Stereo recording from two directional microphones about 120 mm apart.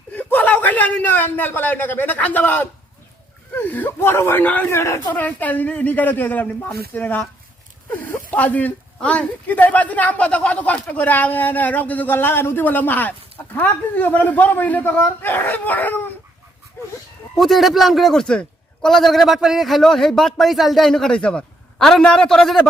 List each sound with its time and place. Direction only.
0.1 s a man's voice: 15° left (ahead or behind)
5.1 s speech: 15° left (ahead or behind)
17.3 s a man's voice: centre (ahead or behind)